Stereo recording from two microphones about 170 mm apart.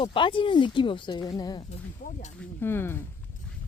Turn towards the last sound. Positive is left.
turn(degrees=15)  # may be behind; listen again after turning